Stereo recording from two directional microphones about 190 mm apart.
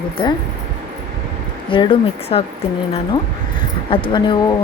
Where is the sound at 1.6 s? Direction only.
25° left (ahead or behind).